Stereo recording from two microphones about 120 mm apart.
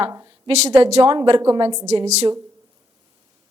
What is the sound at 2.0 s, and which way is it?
Speech, 65° right (ahead or behind).